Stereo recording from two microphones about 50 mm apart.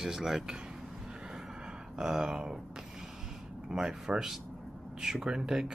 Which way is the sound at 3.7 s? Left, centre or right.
Centre.